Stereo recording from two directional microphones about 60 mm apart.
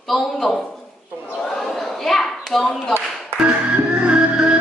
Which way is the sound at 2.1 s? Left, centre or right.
Centre.